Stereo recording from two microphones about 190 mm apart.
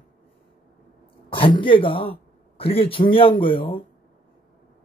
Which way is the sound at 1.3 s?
25° left (ahead or behind).